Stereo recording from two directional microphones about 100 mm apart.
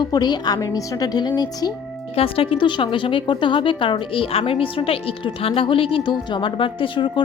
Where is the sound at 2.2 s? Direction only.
65° left (ahead or behind).